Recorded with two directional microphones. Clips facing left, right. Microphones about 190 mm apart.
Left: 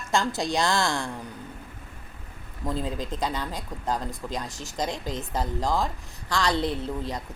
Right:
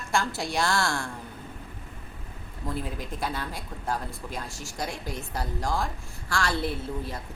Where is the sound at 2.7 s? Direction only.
20° left (ahead or behind).